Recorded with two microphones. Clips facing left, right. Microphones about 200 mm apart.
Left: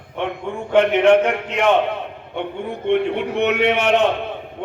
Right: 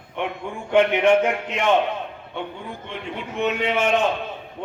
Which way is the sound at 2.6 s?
65° left (ahead or behind).